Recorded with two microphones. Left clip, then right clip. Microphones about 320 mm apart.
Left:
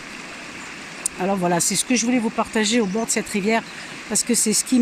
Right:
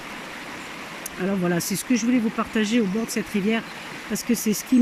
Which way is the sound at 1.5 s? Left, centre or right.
Centre.